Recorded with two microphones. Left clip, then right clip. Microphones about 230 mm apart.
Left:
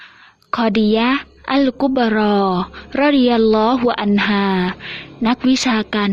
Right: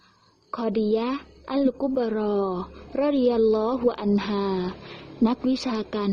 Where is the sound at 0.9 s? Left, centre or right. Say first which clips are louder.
Left 9 dB; left.